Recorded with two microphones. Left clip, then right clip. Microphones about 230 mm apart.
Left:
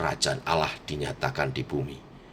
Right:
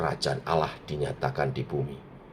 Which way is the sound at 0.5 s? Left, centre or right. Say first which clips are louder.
Left 1 dB; left.